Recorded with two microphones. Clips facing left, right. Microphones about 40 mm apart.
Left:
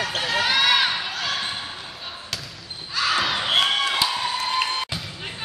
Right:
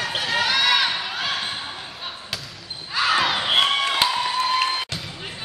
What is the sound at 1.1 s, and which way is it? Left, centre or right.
Basketball bounce, centre.